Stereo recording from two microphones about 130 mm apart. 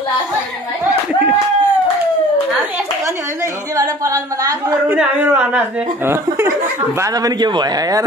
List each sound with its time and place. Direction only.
3.7 s a sound: 25° right (ahead or behind)
4.8 s speech: 15° right (ahead or behind)
7.0 s speech: 30° right (ahead or behind)